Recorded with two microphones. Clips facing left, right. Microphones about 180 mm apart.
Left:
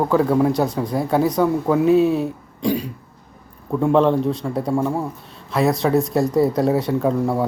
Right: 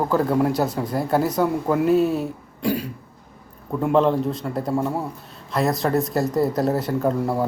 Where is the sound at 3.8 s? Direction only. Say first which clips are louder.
Left 2 dB; 30° left (ahead or behind).